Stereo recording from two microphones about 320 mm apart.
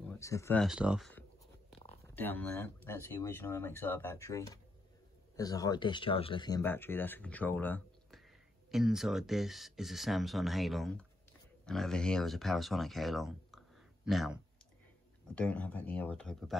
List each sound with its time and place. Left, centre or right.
0.1 s speech: centre
1.8 s a sound: centre
2.1 s speech: centre